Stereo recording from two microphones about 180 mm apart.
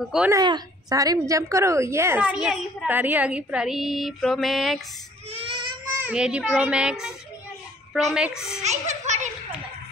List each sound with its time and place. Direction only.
0.3 s a woman's voice: 20° right (ahead or behind); by 4.8 s centre (ahead or behind)
5.9 s a woman's voice: 5° right (ahead or behind)
8.6 s a sound: 40° right (ahead or behind)